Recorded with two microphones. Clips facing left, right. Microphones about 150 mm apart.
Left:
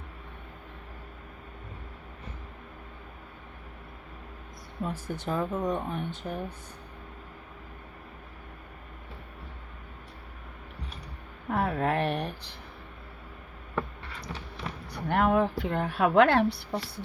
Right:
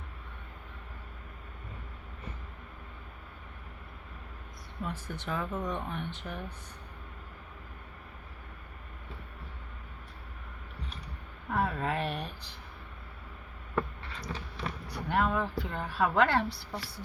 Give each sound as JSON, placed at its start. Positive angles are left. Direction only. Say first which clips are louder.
{"t": 4.8, "sound": "speech", "louder": "left 4 dB", "side_deg": 45}
{"t": 11.4, "sound": "a woman's voice", "louder": "left 4 dB", "side_deg": 60}
{"t": 15.1, "sound": "a woman's voice", "louder": "left 5 dB", "side_deg": 60}